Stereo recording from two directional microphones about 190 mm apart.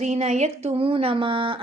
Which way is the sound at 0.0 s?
35° right (ahead or behind).